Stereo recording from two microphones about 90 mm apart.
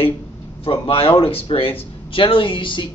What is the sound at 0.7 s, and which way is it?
Speech, 90° left.